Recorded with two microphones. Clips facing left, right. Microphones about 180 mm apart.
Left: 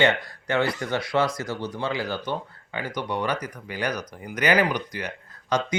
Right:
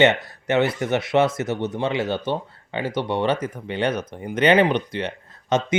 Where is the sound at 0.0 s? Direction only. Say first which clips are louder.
Right 4 dB; 25° right (ahead or behind).